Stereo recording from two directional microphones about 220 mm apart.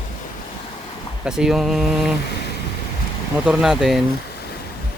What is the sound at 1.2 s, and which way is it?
Speech, 5° right (ahead or behind).